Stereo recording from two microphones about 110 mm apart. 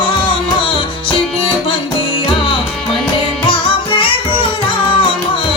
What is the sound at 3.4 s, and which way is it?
Music, 50° left (ahead or behind).